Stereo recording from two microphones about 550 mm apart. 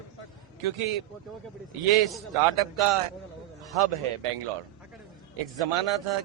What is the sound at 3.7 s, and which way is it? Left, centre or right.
A man's voice, right.